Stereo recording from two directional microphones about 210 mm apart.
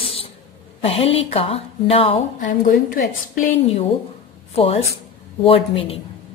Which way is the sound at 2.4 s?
40° left (ahead or behind).